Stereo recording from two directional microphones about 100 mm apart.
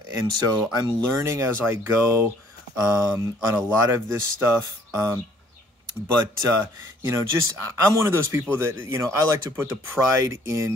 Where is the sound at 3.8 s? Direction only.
25° right (ahead or behind).